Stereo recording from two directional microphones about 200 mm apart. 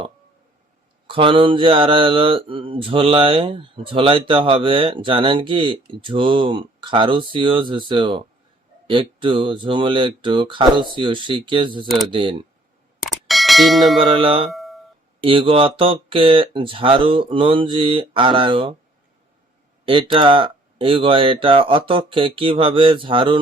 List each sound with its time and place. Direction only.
1.0 s speech: 25° right (ahead or behind)
13.0 s a sound: centre (ahead or behind)
14.0 s speech: 25° right (ahead or behind)
14.5 s a sound: centre (ahead or behind)
15.2 s speech: 25° right (ahead or behind)
19.8 s speech: 25° right (ahead or behind)